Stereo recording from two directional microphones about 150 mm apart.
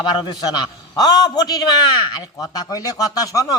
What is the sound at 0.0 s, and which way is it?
A man's voice, 30° left (ahead or behind).